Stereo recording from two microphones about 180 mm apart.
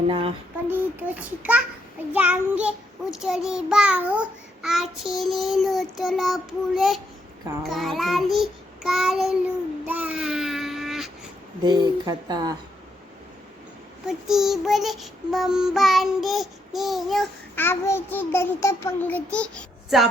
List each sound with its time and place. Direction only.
0.1 s child singing: 30° right (ahead or behind)
0.7 s a child's voice: 10° right (ahead or behind)
2.1 s child singing: 10° right (ahead or behind)
11.6 s speech: 20° right (ahead or behind)
14.1 s child singing: centre (ahead or behind)
17.5 s a child's voice: 10° left (ahead or behind)